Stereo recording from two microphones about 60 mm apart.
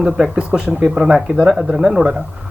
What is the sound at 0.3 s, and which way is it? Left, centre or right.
Speech, centre.